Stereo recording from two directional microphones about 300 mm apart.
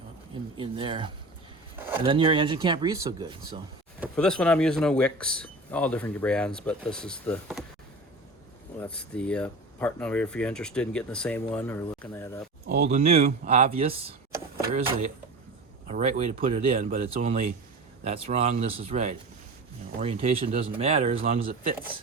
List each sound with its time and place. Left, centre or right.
0.5 s speech: centre
4.0 s speech: centre
8.8 s speech: centre
12.6 s speech: right
15.9 s speech: right